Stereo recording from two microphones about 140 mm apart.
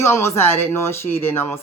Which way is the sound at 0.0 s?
20° left (ahead or behind).